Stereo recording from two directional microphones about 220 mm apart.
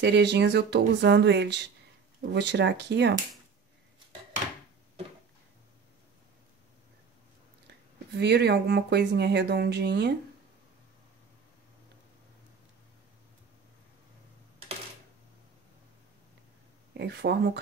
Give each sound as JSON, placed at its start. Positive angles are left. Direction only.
{"t": 0.0, "sound": "speech", "side_deg": -50}
{"t": 7.6, "sound": "speech", "side_deg": -50}
{"t": 16.9, "sound": "speech", "side_deg": -50}